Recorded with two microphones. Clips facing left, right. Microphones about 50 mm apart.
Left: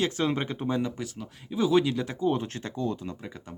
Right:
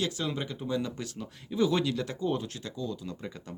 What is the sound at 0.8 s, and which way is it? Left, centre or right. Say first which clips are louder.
Speech: left 3 dB; left.